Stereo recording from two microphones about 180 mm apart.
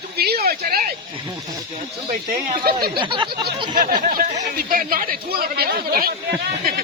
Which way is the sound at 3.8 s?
50° right (ahead or behind).